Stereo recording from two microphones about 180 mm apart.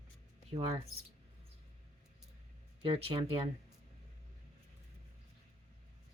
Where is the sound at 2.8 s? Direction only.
30° right (ahead or behind).